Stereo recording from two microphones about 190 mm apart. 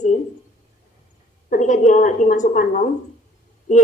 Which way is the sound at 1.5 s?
40° left (ahead or behind).